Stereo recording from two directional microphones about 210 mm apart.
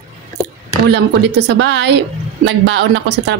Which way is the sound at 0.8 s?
55° right (ahead or behind).